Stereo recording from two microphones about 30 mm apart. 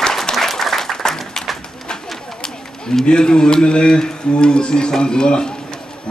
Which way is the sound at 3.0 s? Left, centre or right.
Left.